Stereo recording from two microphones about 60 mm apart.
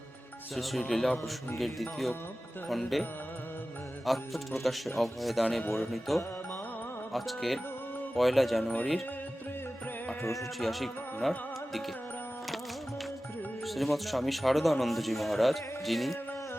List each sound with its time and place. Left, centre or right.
0.5 s speech: centre
4.0 s speech: centre
8.6 s speech: left
10.6 s speech: centre
13.7 s speech: centre